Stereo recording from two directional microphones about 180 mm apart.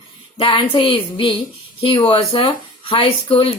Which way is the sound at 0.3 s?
30° left (ahead or behind).